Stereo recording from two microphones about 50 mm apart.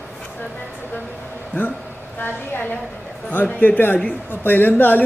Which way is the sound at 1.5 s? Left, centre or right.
Left.